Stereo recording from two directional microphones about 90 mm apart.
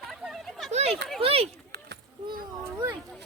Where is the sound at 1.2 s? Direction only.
90° right.